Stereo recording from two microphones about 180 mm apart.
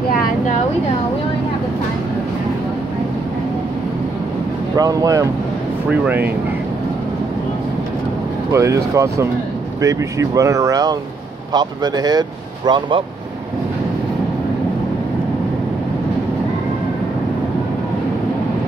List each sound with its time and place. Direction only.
4.7 s speech: 20° right (ahead or behind)
8.5 s speech: 15° right (ahead or behind)